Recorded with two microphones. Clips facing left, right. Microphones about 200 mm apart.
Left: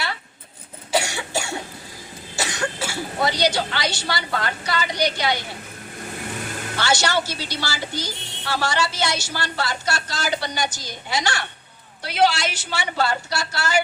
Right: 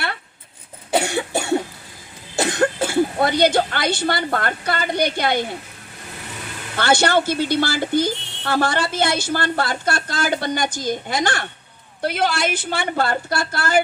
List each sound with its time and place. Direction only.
0.9 s cough: 55° right (ahead or behind)
2.3 s speech: 55° right (ahead or behind)
6.7 s a woman's voice: 55° right (ahead or behind)